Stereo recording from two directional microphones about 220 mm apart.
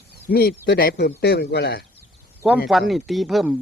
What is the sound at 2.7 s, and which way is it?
Speech, centre (ahead or behind).